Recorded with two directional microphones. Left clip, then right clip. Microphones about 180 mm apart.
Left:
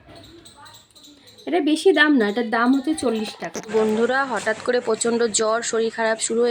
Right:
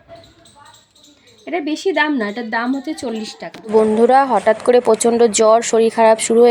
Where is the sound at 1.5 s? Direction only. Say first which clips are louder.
Left 2 dB; centre (ahead or behind).